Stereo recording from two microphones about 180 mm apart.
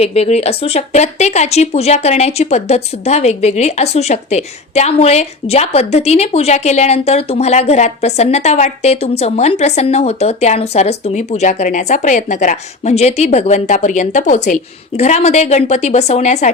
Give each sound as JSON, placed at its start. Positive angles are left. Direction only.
{"t": 0.0, "sound": "a woman's voice", "side_deg": 35}